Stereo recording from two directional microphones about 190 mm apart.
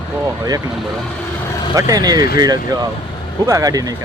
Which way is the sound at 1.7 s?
20° right (ahead or behind).